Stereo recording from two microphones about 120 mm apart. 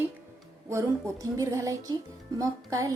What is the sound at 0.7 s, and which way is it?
A woman's voice, 30° right (ahead or behind).